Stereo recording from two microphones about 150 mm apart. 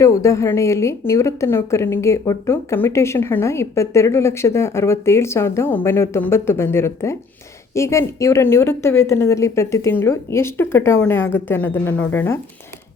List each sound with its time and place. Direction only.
0.0 s a woman's voice: 20° left (ahead or behind)